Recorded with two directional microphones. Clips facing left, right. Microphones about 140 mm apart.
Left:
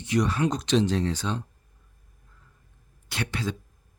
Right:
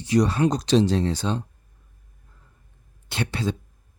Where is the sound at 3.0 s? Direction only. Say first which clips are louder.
Right 4 dB; 30° right (ahead or behind).